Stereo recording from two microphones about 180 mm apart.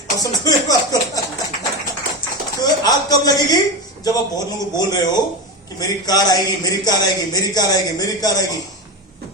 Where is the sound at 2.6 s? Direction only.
20° left (ahead or behind).